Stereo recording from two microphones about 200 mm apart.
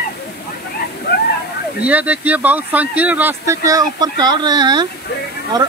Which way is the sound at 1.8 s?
5° right (ahead or behind).